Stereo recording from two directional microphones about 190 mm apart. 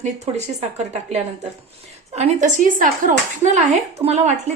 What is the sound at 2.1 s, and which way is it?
A woman's voice, 40° right (ahead or behind).